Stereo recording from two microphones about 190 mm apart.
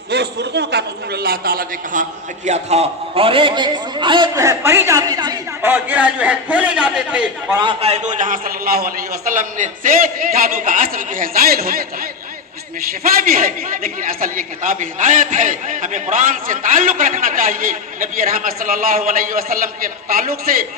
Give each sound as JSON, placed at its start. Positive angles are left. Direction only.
{"t": 0.1, "sound": "a man's voice", "side_deg": -60}
{"t": 7.6, "sound": "a man's voice", "side_deg": -30}
{"t": 13.0, "sound": "a man's voice", "side_deg": -50}